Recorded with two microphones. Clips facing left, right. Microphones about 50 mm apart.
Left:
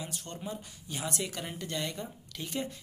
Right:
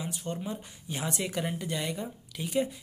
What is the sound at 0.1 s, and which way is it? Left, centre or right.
Speech, centre.